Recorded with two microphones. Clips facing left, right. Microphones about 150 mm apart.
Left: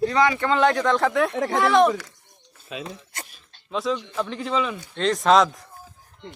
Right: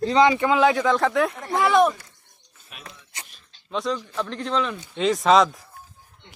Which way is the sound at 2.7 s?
90° left.